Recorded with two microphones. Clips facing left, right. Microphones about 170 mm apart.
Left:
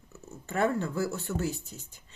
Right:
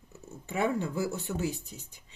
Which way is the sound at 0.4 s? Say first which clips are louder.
Left 1 dB; 10° right (ahead or behind).